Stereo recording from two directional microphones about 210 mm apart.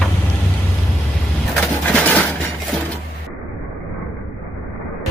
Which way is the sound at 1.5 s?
5° left (ahead or behind).